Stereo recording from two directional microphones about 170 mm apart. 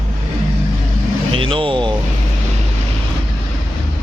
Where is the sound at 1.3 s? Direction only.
30° right (ahead or behind).